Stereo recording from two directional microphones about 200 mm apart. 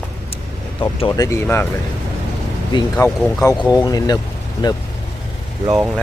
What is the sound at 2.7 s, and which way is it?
Speech, 20° left (ahead or behind).